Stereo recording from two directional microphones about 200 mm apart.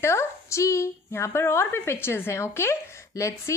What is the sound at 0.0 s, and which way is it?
A woman's voice, 15° left (ahead or behind).